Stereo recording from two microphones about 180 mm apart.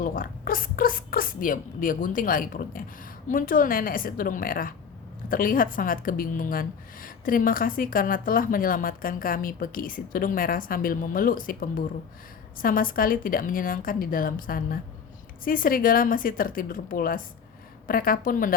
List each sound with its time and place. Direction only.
0.0 s a woman's voice: 50° left (ahead or behind)